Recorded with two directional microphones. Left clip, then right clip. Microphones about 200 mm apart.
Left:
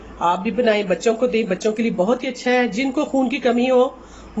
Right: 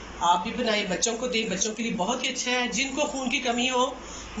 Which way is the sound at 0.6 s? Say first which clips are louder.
Left 8 dB; 55° left (ahead or behind).